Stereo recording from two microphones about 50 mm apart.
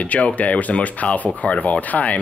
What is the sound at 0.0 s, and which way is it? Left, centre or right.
Speech, left.